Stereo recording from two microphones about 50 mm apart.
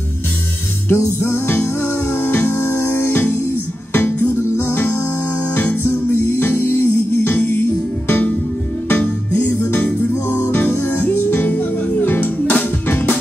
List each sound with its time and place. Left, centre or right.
0.9 s music: left